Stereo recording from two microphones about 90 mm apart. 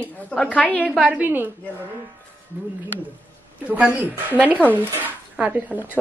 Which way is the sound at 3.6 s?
15° right (ahead or behind).